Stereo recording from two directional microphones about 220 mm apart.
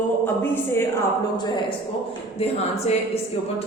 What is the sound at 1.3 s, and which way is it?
A woman's voice, 20° left (ahead or behind).